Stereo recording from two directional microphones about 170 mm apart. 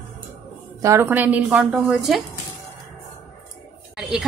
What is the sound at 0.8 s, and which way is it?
A woman's voice, 15° right (ahead or behind).